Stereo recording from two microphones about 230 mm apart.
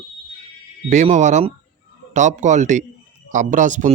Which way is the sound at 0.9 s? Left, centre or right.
Right.